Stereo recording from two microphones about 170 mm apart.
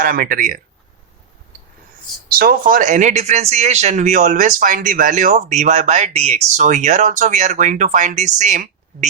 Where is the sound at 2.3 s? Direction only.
60° right (ahead or behind).